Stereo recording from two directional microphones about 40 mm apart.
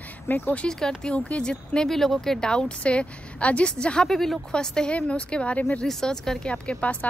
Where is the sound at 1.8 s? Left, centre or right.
Centre; by 4.1 s left.